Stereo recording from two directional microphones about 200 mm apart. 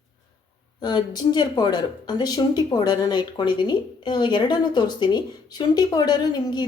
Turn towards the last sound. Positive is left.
turn(degrees=20)  # may be behind; listen again after turning